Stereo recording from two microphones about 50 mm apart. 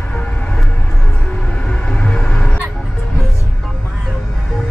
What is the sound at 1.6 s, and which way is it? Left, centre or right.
Music, left.